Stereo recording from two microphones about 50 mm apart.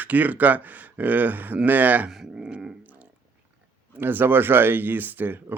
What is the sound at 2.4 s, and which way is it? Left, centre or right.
Grunt, centre.